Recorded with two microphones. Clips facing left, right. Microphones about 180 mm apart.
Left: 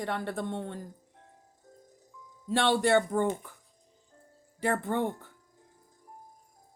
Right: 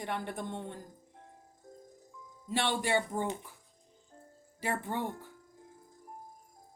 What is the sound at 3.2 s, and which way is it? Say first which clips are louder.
Speech: left 6 dB; 50° left (ahead or behind).